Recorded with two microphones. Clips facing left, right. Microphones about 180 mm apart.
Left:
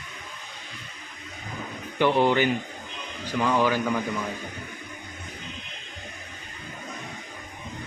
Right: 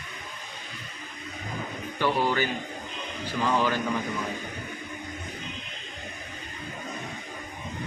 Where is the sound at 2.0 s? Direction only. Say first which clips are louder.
Left 5 dB; 20° left (ahead or behind).